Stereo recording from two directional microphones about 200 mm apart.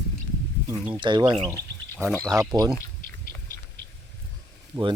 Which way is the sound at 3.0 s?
45° left (ahead or behind).